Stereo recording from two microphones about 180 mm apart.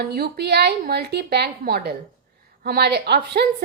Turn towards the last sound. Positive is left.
turn(degrees=-65)  # may be behind; listen again after turning